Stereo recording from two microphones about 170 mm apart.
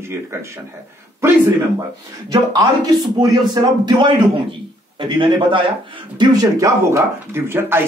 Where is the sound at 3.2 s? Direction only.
25° right (ahead or behind).